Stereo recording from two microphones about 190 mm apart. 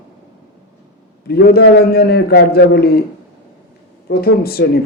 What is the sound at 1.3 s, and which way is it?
Speech, 55° left (ahead or behind).